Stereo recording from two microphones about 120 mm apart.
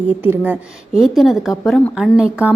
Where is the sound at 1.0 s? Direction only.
Centre (ahead or behind).